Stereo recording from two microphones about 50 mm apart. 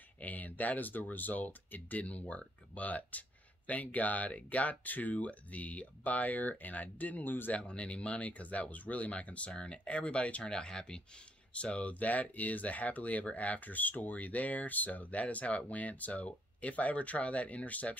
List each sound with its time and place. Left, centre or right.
0.2 s speech: left
7.5 s speech: left